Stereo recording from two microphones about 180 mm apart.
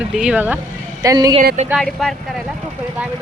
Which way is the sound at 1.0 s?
20° right (ahead or behind).